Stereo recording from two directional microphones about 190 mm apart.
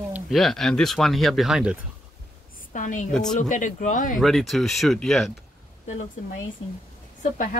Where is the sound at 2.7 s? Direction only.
40° left (ahead or behind).